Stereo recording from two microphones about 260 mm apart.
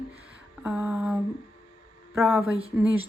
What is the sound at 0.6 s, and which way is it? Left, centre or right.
A woman's voice, centre.